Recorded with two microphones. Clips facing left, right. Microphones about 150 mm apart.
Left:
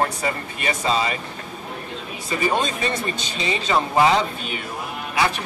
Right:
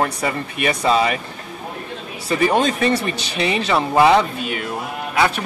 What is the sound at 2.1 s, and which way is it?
Speech, 75° right (ahead or behind).